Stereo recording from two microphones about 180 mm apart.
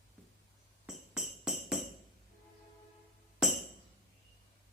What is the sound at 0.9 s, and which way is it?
Music, centre (ahead or behind).